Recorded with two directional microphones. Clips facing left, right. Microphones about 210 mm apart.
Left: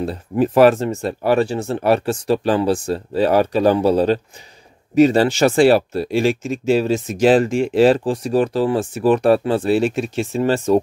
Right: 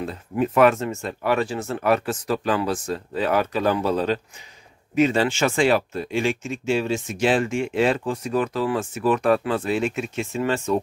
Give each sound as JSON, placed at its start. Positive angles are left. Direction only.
{"t": 0.0, "sound": "speech", "side_deg": 35}